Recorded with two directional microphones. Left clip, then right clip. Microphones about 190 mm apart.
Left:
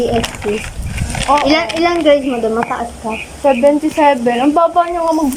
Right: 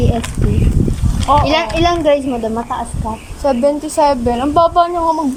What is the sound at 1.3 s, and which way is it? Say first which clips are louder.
Speech: even; 15° right (ahead or behind).